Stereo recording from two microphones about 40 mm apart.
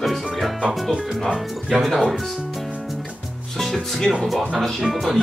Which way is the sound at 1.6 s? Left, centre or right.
Centre.